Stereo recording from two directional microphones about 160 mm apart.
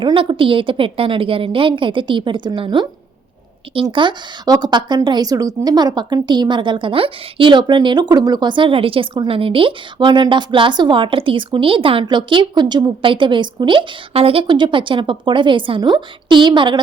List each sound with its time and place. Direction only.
0.0 s a woman's voice: 30° right (ahead or behind)